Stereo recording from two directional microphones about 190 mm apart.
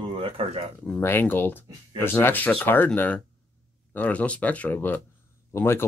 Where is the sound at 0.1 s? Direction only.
30° right (ahead or behind).